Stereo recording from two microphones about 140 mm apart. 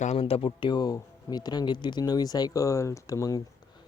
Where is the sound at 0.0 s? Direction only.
50° left (ahead or behind); by 3.4 s 25° left (ahead or behind).